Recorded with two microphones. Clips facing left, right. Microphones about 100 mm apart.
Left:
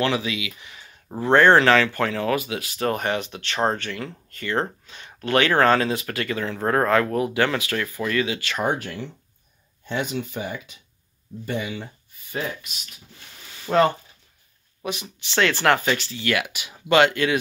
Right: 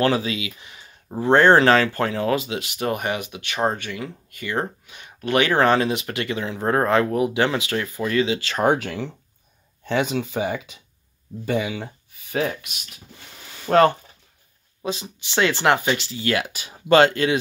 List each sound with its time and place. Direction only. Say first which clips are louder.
0.0 s speech: right 3 dB; 35° right (ahead or behind)
8.6 s speech: right 7 dB; 90° right
12.3 s speech: right 5 dB; 65° right (ahead or behind)
13.7 s speech: right 3 dB; 55° right (ahead or behind)
14.8 s speech: right 2 dB; 30° right (ahead or behind)